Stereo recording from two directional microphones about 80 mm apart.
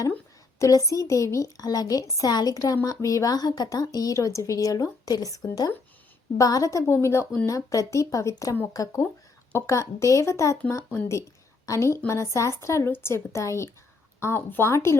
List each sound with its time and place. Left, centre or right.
0.6 s a woman's voice: left
7.4 s a woman's voice: left
9.5 s a woman's voice: left
11.6 s a woman's voice: left